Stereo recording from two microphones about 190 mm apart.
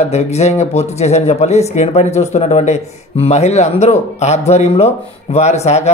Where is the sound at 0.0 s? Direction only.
35° left (ahead or behind).